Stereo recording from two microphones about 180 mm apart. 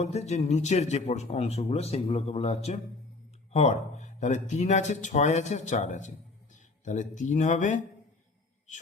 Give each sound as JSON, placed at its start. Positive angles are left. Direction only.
{"t": 0.0, "sound": "a man's voice", "side_deg": 35}